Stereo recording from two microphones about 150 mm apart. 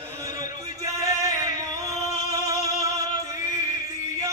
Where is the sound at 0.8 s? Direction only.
20° right (ahead or behind).